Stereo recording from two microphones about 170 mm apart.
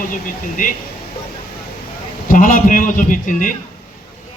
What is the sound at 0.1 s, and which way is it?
Speech, 50° left (ahead or behind).